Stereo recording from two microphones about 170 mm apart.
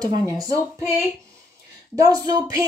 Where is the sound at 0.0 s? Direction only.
20° right (ahead or behind).